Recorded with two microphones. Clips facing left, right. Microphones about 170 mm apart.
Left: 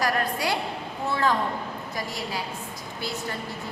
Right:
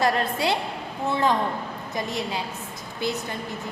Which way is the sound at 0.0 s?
25° right (ahead or behind).